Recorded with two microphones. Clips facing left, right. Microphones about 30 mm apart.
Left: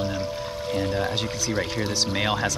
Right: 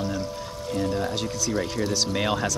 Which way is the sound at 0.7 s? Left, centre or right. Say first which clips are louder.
Even; left.